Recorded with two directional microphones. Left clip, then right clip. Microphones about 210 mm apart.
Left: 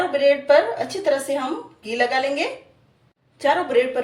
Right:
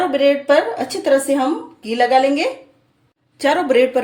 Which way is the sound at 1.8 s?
50° right (ahead or behind).